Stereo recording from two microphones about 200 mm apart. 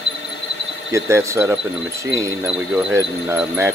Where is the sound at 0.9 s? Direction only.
15° right (ahead or behind).